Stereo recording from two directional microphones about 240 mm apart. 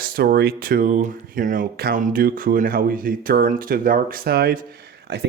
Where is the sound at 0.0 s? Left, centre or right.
Right.